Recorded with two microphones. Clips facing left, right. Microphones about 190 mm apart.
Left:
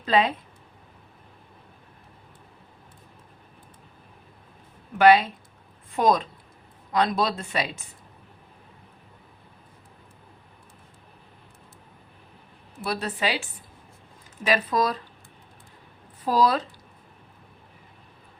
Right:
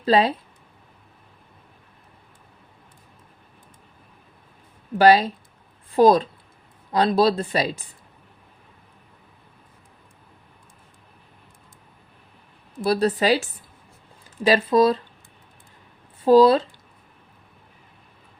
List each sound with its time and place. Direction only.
0.0 s speech: 35° right (ahead or behind)
4.9 s speech: 35° right (ahead or behind)
12.8 s speech: 35° right (ahead or behind)
14.4 s speech: 30° right (ahead or behind)
16.2 s speech: 30° right (ahead or behind)